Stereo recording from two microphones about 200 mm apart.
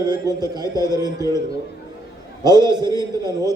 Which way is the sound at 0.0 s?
20° right (ahead or behind).